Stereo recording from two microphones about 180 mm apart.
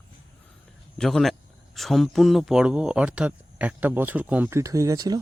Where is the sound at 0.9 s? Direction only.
Centre (ahead or behind).